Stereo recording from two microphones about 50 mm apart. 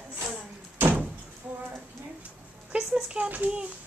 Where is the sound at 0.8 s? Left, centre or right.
Right.